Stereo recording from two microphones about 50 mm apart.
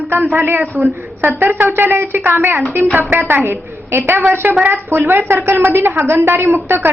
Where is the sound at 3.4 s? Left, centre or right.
Right.